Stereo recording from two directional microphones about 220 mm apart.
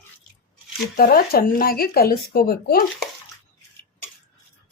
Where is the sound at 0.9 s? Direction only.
45° left (ahead or behind).